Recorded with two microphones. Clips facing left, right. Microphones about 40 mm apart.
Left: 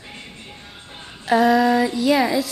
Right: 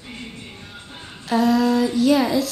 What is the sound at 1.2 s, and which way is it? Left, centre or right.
Female singing, left.